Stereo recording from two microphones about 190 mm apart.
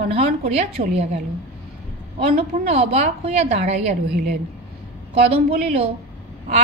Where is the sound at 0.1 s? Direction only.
35° right (ahead or behind).